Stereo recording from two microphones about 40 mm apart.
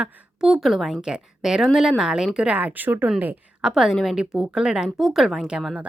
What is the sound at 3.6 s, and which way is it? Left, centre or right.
Speech, centre.